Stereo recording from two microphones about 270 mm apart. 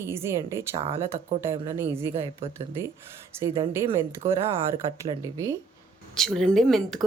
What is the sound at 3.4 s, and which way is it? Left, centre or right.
Speech, centre.